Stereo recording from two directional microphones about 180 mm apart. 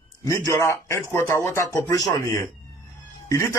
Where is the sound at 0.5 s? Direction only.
15° left (ahead or behind).